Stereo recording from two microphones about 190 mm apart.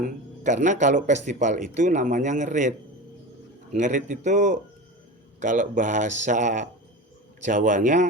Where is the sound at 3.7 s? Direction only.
40° right (ahead or behind).